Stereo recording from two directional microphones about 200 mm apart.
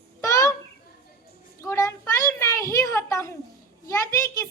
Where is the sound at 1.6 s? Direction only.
15° left (ahead or behind).